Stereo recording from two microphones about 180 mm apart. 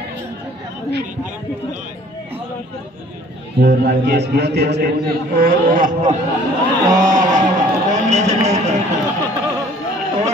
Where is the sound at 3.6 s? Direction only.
65° right (ahead or behind).